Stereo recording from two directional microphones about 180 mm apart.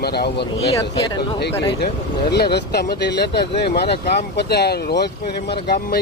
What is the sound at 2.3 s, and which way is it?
Speech, 65° left (ahead or behind).